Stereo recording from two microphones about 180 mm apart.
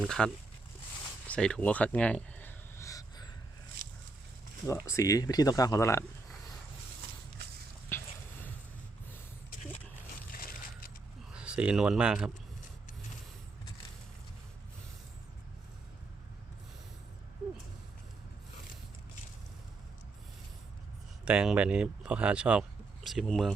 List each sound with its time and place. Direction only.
0.0 s speech: 5° left (ahead or behind)
1.3 s a sound: 5° left (ahead or behind)
4.6 s speech: 15° left (ahead or behind)
7.9 s a sound: 15° left (ahead or behind)
10.3 s mechanisms: 55° left (ahead or behind)
11.3 s speech: 5° right (ahead or behind)
21.2 s speech: 5° right (ahead or behind)